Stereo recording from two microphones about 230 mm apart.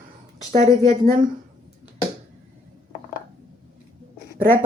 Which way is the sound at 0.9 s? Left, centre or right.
Right.